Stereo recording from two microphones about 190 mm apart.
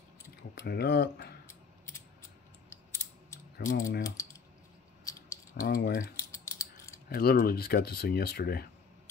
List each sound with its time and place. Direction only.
0.6 s speech: 60° left (ahead or behind)
3.5 s speech: 65° left (ahead or behind)
4.0 s speech: 15° left (ahead or behind)
5.1 s a sound: 15° left (ahead or behind)
5.7 s speech: 50° left (ahead or behind)
6.1 s typing: 15° left (ahead or behind)
7.1 s speech: 50° left (ahead or behind)